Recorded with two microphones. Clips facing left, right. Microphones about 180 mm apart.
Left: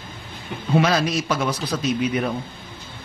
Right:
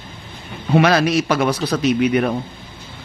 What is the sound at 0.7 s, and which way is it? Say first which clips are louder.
Speech: right 5 dB; 70° right (ahead or behind).